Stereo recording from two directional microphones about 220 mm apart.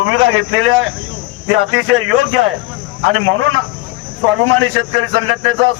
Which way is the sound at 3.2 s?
70° right (ahead or behind).